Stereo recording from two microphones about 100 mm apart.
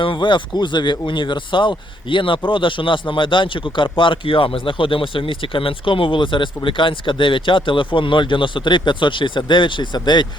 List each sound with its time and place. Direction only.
0.0 s a man's voice: 55° left (ahead or behind)